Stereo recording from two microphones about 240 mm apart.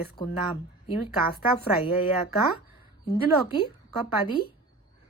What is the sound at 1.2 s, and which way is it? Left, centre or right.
Speech, left.